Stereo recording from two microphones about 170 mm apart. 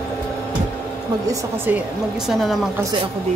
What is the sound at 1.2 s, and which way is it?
Speech, 15° right (ahead or behind).